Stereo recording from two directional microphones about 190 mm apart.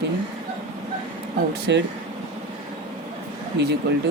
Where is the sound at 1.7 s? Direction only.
65° right (ahead or behind).